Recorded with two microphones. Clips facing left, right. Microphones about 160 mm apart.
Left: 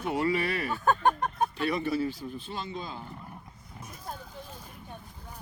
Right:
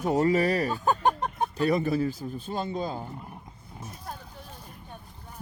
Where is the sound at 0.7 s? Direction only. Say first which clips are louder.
Even; 15° right (ahead or behind).